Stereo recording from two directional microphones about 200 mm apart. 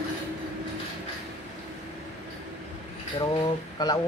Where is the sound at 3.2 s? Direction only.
25° left (ahead or behind).